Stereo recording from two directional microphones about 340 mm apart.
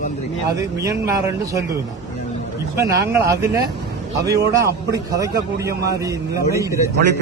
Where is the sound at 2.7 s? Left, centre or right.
Centre.